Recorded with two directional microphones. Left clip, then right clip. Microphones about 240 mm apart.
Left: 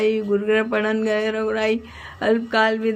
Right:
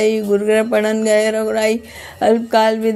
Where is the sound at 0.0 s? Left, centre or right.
Right.